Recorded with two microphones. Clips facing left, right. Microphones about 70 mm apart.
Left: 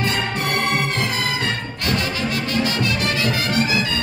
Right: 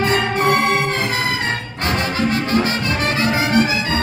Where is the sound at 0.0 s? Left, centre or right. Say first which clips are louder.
Right 6 dB; right.